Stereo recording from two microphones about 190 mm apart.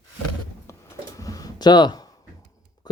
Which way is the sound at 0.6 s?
15° left (ahead or behind).